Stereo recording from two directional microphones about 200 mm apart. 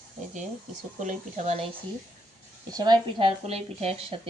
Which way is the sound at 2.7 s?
20° right (ahead or behind).